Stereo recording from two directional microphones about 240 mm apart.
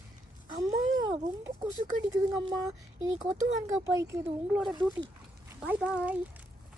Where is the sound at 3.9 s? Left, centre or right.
Centre.